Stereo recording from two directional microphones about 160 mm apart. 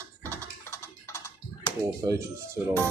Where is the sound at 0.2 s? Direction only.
15° left (ahead or behind).